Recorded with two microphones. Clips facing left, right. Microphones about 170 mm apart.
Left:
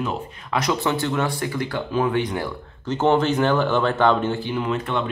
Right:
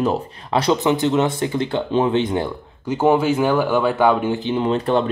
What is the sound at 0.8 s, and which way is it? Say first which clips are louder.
Speech: right 5 dB; 20° right (ahead or behind).